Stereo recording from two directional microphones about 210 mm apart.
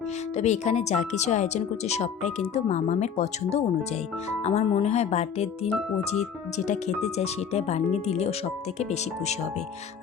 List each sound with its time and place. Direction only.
0.3 s speech: 30° left (ahead or behind)